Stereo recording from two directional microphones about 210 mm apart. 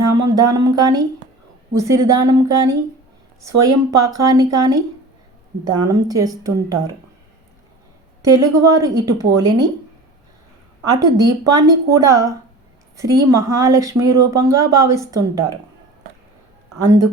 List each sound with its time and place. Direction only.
0.1 s speech: 15° right (ahead or behind)
8.2 s speech: 15° right (ahead or behind)
10.8 s speech: 20° right (ahead or behind)